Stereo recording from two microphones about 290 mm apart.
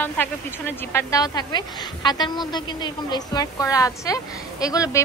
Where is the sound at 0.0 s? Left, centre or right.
Centre.